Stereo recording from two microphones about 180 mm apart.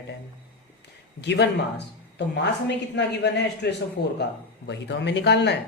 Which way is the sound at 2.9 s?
70° left (ahead or behind).